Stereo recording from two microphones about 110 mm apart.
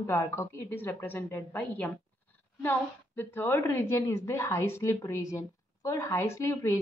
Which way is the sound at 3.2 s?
20° left (ahead or behind).